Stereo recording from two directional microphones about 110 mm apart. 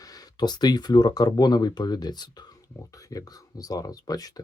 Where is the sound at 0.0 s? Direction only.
35° left (ahead or behind).